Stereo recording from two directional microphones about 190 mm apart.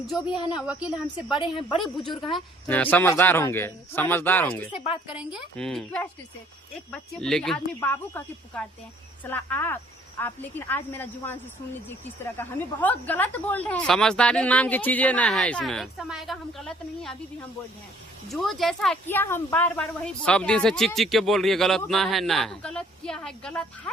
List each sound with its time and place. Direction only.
0.6 s speech: 5° right (ahead or behind)
1.4 s a woman's voice: 25° left (ahead or behind)
2.6 s a woman's voice: 10° left (ahead or behind)
4.7 s a woman's voice: 30° left (ahead or behind)
5.0 s a woman's voice: 5° right (ahead or behind)
18.3 s speech: centre (ahead or behind)